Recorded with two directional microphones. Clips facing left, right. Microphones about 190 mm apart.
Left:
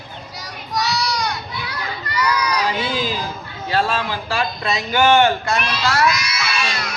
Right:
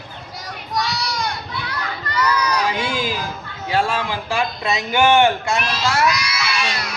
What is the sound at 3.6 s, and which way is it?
A man's voice, 15° right (ahead or behind).